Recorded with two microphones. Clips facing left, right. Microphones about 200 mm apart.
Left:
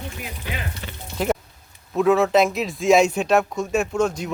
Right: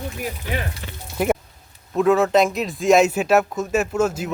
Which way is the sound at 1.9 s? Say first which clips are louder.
Right 1 dB; centre (ahead or behind).